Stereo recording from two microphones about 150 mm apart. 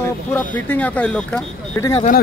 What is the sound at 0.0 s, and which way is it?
Speech, 15° left (ahead or behind).